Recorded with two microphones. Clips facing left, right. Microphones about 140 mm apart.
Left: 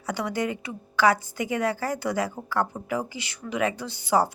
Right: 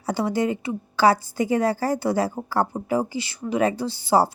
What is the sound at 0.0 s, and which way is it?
A woman's voice, 30° right (ahead or behind).